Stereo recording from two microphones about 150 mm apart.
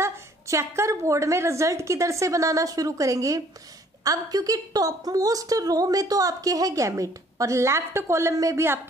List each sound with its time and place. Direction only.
0.0 s a woman's voice: 20° right (ahead or behind)